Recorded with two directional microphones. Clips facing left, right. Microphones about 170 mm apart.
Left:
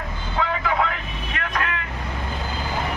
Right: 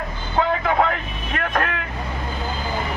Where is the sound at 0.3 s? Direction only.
40° right (ahead or behind).